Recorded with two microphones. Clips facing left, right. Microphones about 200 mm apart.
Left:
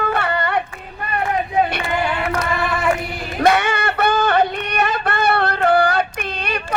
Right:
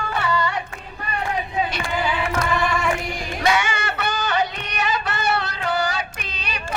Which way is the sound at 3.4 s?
60° left (ahead or behind).